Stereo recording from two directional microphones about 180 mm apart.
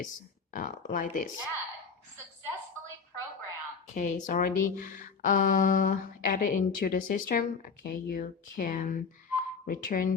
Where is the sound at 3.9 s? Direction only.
45° left (ahead or behind).